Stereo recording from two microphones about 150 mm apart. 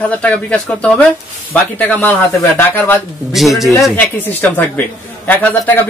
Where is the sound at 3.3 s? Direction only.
Centre (ahead or behind).